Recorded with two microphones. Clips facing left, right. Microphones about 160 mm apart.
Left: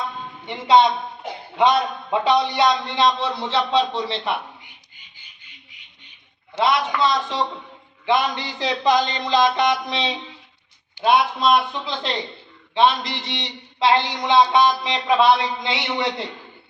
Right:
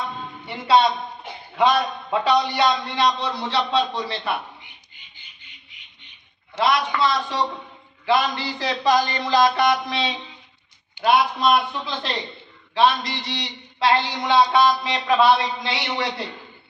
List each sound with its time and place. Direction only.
0.4 s a man's voice: 20° left (ahead or behind)
7.0 s a man's voice: 25° left (ahead or behind)